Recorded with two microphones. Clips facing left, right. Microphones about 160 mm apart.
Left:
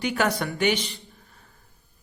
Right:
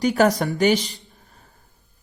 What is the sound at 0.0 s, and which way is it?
A woman's voice, 40° right (ahead or behind).